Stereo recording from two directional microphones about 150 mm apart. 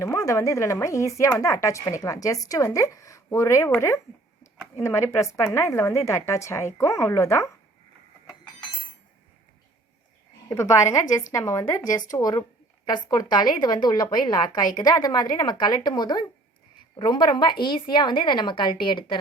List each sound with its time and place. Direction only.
0.0 s a woman's voice: 20° left (ahead or behind)
10.5 s a woman's voice: 20° left (ahead or behind)